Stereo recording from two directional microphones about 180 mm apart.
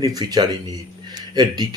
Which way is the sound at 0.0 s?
20° right (ahead or behind).